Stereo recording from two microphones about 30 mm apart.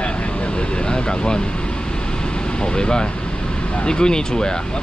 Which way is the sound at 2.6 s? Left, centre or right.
Left.